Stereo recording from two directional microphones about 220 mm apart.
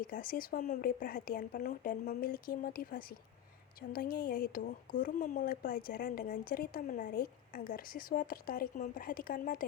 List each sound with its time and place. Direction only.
0.0 s a woman's voice: 40° left (ahead or behind)